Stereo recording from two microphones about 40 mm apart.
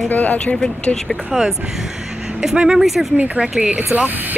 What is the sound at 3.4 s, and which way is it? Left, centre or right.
Speech, centre.